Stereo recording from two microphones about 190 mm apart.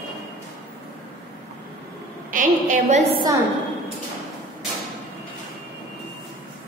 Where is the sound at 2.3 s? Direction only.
45° right (ahead or behind).